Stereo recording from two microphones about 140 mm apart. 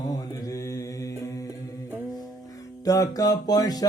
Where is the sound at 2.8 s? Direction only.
25° left (ahead or behind).